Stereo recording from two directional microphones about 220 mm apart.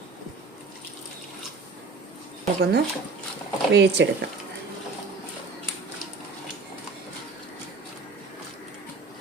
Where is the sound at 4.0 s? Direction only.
55° right (ahead or behind).